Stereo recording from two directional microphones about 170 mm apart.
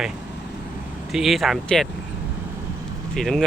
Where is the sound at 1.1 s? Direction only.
Centre (ahead or behind).